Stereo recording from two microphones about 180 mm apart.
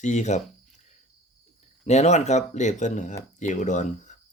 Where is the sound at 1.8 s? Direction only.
40° left (ahead or behind).